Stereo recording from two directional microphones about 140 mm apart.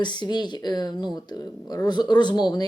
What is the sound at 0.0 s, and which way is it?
Speech, 30° left (ahead or behind).